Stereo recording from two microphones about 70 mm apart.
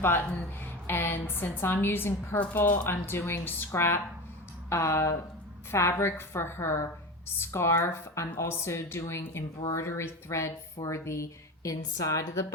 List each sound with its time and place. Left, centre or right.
0.2 s a woman's voice: left
2.9 s a woman's voice: left